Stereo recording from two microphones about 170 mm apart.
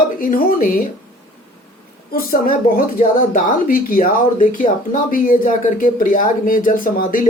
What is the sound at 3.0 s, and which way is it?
Speech, 45° left (ahead or behind).